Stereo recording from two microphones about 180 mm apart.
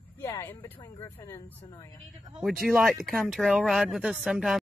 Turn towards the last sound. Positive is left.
turn(degrees=0)  # may be behind; listen again after turning